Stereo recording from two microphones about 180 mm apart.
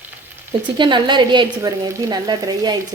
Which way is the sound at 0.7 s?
25° right (ahead or behind).